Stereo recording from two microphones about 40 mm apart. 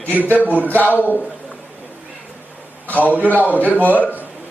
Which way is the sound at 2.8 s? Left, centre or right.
Left.